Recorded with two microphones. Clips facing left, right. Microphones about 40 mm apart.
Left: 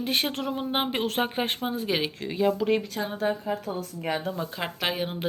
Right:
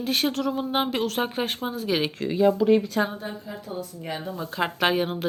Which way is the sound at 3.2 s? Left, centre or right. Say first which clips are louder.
Left 8 dB; left.